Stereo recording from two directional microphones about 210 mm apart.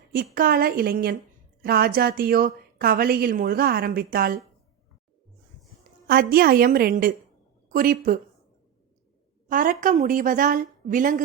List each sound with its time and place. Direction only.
0.3 s a woman's voice: 45° right (ahead or behind)
6.1 s a woman's voice: 45° right (ahead or behind)
9.5 s a woman's voice: 40° right (ahead or behind)